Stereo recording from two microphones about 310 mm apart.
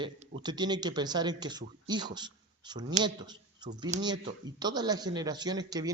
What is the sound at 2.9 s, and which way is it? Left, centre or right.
Speech, centre.